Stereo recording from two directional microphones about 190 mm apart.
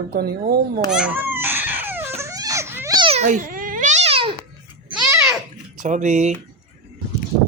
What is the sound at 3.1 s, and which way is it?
Babbling, 40° right (ahead or behind).